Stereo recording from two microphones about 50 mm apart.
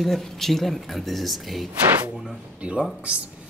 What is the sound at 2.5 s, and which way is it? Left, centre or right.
Speech, right.